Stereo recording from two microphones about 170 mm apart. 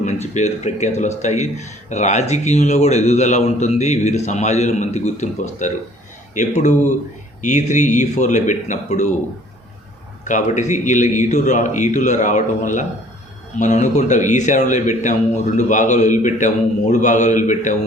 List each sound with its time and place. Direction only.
0.0 s speech: 40° left (ahead or behind)
10.2 s speech: 45° left (ahead or behind)